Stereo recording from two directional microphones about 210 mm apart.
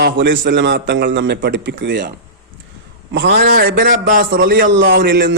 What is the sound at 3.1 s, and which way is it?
A man's voice, 55° right (ahead or behind).